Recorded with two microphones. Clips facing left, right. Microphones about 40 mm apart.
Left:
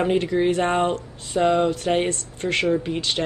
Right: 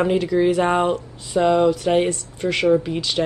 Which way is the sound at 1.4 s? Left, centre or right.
Centre.